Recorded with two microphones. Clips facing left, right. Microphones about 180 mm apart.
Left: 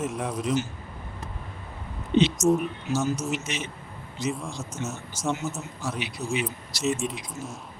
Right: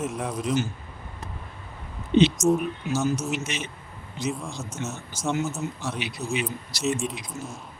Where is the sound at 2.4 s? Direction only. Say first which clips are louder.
Even; centre (ahead or behind).